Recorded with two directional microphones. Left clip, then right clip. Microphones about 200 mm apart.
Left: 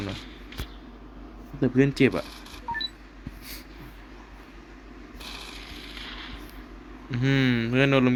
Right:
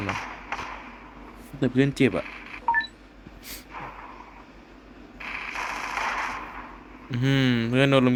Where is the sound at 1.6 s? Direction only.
5° right (ahead or behind).